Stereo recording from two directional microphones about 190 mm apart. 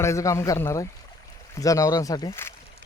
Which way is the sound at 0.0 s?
15° left (ahead or behind).